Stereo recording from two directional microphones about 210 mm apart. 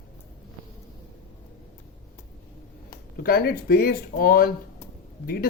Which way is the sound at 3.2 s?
45° left (ahead or behind).